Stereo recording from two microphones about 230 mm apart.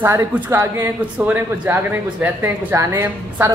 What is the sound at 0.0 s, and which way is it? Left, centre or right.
Speech, centre.